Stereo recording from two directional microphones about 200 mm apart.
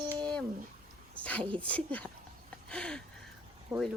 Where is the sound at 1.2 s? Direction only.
5° left (ahead or behind).